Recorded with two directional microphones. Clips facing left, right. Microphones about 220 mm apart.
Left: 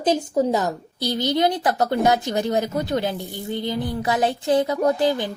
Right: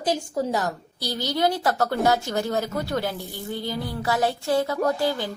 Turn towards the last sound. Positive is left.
turn(degrees=20)  # may be behind; listen again after turning